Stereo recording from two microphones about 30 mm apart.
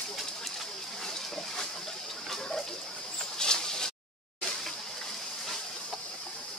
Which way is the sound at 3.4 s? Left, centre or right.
Left.